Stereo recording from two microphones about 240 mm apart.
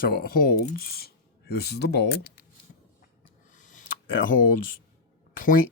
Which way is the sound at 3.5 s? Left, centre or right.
Left.